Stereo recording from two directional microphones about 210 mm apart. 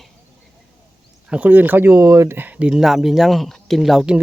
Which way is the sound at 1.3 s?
10° right (ahead or behind).